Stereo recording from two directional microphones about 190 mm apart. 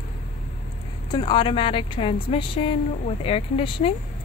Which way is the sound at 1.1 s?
25° left (ahead or behind).